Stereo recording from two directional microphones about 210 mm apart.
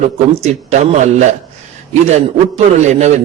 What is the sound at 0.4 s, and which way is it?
Speech, 30° right (ahead or behind).